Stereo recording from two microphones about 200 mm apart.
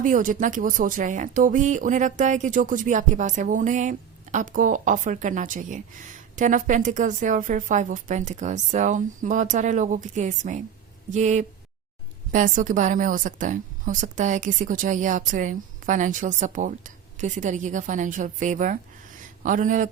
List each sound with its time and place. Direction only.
0.0 s a woman's voice: 40° right (ahead or behind)